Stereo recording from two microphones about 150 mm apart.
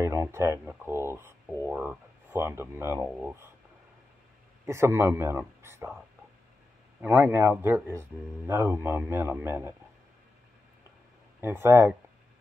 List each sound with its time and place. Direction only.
0.0 s speech: 20° right (ahead or behind)
4.6 s speech: 20° right (ahead or behind)
7.0 s speech: 15° right (ahead or behind)
11.4 s speech: 15° right (ahead or behind)